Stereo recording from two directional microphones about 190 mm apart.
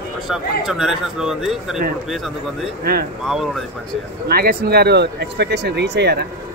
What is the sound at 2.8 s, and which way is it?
Speech, 55° right (ahead or behind).